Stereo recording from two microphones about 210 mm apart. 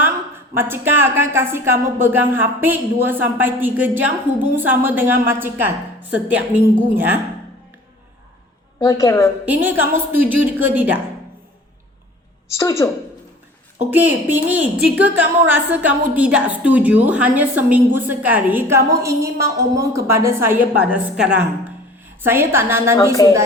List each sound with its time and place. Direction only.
0.5 s a woman's voice: 10° right (ahead or behind)
8.8 s a woman's voice: 15° left (ahead or behind)
9.5 s a woman's voice: 10° right (ahead or behind)
12.5 s a woman's voice: 15° left (ahead or behind)
13.9 s a woman's voice: 10° right (ahead or behind)
23.2 s a woman's voice: 20° left (ahead or behind)